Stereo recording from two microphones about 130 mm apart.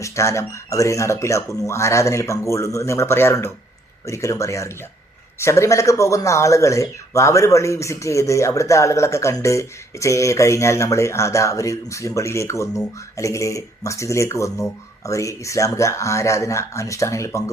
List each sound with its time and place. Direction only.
0.0 s speech: 20° left (ahead or behind)